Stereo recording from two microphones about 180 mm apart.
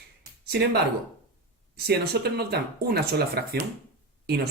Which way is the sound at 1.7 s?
65° right (ahead or behind).